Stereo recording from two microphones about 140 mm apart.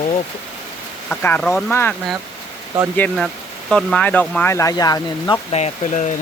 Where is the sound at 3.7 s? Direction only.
Centre (ahead or behind); by 5.4 s 25° left (ahead or behind).